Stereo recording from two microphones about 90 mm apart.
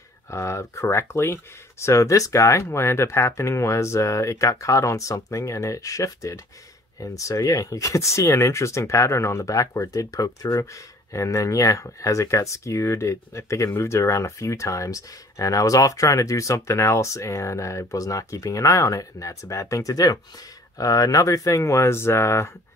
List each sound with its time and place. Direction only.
0.3 s speech: 30° left (ahead or behind)